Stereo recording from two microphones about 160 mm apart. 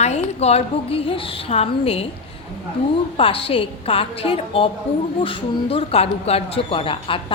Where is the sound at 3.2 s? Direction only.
35° left (ahead or behind).